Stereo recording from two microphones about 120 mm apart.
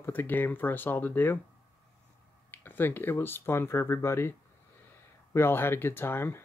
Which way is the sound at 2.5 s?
15° left (ahead or behind).